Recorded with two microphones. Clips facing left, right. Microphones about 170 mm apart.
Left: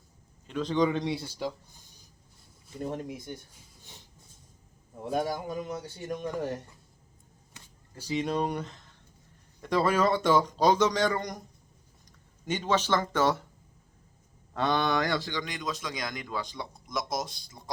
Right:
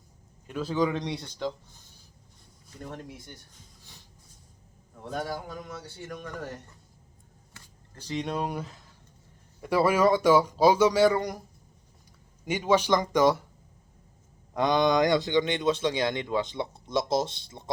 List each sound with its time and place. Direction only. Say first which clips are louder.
0.4 s speech: left 1 dB; 5° right (ahead or behind)
2.8 s a man's voice: left 6 dB; 20° left (ahead or behind)
4.9 s a man's voice: left 3 dB; 15° left (ahead or behind)
7.6 s a sound: even; 20° left (ahead or behind)
7.9 s speech: left 2 dB; 5° left (ahead or behind)
12.5 s speech: right 4 dB; 10° right (ahead or behind)
14.5 s a man's voice: right 4 dB; 15° right (ahead or behind)